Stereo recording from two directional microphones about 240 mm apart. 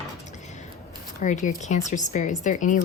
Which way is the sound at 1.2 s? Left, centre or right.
Left.